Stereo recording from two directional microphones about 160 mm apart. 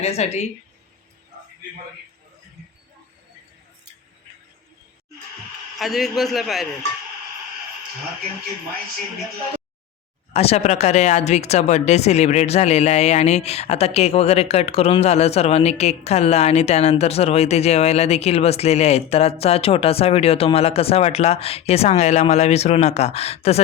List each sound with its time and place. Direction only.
0.0 s a woman's voice: 40° left (ahead or behind)
5.8 s a man's voice: centre (ahead or behind)
10.3 s a woman's voice: 40° left (ahead or behind)